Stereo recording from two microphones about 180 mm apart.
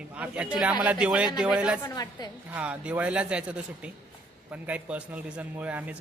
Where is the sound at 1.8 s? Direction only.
20° left (ahead or behind).